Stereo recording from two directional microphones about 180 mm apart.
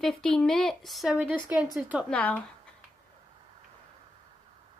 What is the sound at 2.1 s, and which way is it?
Speech, 10° left (ahead or behind).